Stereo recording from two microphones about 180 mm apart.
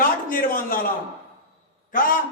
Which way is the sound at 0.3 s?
50° left (ahead or behind).